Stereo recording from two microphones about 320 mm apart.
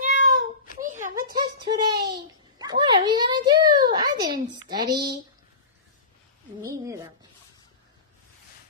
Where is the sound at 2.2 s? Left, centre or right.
Centre.